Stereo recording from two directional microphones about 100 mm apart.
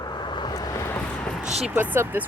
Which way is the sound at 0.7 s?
25° left (ahead or behind).